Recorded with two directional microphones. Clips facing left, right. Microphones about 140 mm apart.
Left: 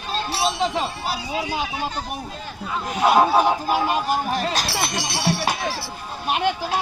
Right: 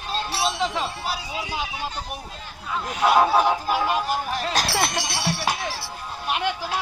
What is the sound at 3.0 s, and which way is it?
Speech, 25° left (ahead or behind).